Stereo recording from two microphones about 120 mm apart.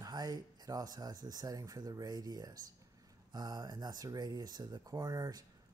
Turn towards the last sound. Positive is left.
turn(degrees=-30)  # may be behind; listen again after turning